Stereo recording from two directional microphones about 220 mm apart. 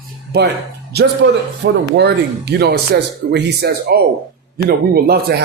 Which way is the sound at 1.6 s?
50° right (ahead or behind).